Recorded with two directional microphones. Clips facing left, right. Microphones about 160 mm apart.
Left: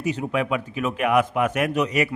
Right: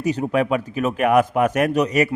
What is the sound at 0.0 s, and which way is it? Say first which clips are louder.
A man's voice: right 4 dB; 40° right (ahead or behind).